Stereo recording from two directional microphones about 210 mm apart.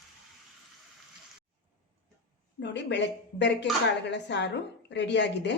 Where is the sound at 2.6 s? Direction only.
55° left (ahead or behind).